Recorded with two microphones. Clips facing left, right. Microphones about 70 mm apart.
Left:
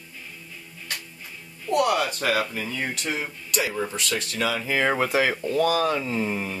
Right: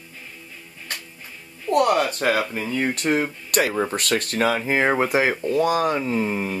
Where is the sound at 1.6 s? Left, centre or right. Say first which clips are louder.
Right 3 dB; right.